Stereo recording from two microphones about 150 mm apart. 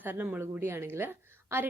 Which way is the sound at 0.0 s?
10° right (ahead or behind).